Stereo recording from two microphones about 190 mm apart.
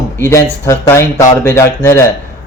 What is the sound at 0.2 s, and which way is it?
Speech, 15° left (ahead or behind).